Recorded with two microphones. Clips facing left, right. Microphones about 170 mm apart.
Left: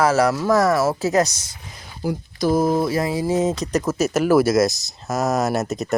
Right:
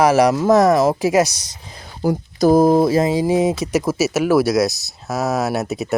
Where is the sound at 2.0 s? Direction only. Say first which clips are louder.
Right 6 dB; 45° right (ahead or behind).